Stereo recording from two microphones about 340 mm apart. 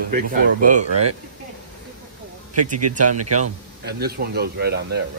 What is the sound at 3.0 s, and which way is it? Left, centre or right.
Speech, right.